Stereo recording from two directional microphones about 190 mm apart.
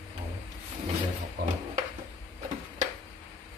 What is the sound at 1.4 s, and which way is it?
Speech, 60° right (ahead or behind).